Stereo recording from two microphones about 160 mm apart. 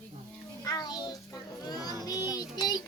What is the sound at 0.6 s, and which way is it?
Child singing, 25° left (ahead or behind).